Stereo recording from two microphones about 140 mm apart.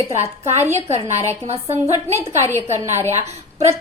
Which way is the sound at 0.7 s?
50° right (ahead or behind).